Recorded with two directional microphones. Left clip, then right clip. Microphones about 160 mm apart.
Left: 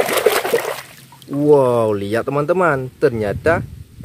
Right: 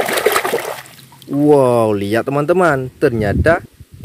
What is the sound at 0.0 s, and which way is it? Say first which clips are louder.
Trickle: even; 5° right (ahead or behind).